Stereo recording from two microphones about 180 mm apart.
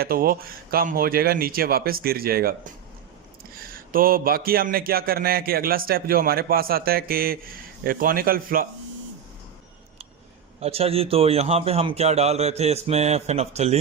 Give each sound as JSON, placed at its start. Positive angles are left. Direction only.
{"t": 0.0, "sound": "a man's voice", "side_deg": -55}
{"t": 3.6, "sound": "a man's voice", "side_deg": -55}
{"t": 10.6, "sound": "a man's voice", "side_deg": -35}